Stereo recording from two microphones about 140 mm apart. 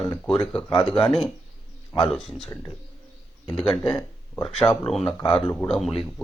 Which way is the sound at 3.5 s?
5° left (ahead or behind).